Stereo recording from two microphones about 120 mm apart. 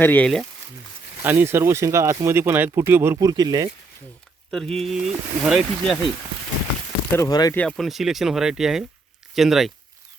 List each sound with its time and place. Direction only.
0.0 s speech: 15° left (ahead or behind)
1.2 s speech: 15° right (ahead or behind)
3.2 s speech: 35° right (ahead or behind)
4.5 s speech: 5° left (ahead or behind)
7.2 s speech: 35° left (ahead or behind)
7.5 s speech: 10° left (ahead or behind)
7.8 s speech: centre (ahead or behind)